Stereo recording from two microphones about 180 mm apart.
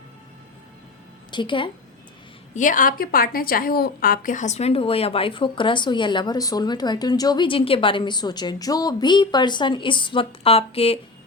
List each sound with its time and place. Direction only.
1.3 s a woman's voice: 25° left (ahead or behind)
2.6 s a woman's voice: 45° left (ahead or behind)